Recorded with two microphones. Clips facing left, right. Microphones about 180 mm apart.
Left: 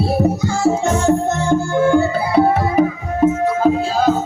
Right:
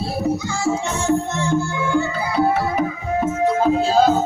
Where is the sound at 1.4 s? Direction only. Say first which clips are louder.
Left 6 dB; 45° left (ahead or behind).